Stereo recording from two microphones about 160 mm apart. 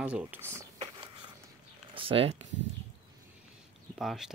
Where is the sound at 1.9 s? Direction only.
35° right (ahead or behind).